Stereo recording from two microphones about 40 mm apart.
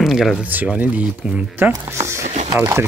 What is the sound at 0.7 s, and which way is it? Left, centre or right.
Speech, right.